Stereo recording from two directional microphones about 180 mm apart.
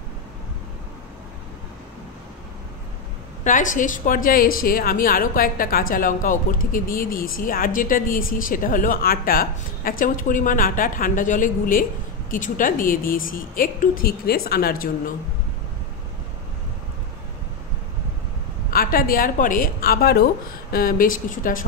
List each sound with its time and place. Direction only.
3.4 s a woman's voice: 45° left (ahead or behind)
18.7 s a woman's voice: 55° left (ahead or behind)